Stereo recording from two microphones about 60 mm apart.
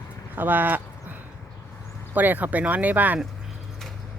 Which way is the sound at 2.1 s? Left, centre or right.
Right.